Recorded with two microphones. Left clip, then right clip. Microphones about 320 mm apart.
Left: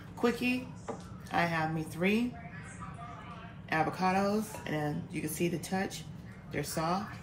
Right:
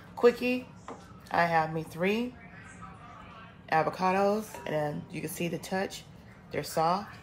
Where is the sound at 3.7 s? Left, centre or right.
Right.